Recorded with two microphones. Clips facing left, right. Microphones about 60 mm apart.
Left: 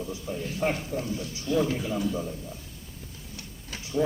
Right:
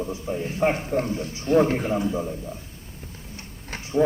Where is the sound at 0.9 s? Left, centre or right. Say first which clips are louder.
Right 6 dB; right.